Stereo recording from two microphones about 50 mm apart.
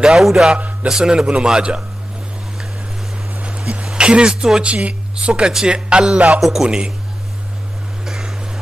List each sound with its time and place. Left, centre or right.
0.0 s a man's voice: centre
3.4 s music: right
3.8 s speech: centre
4.6 s a man's voice: right
8.0 s a sound: centre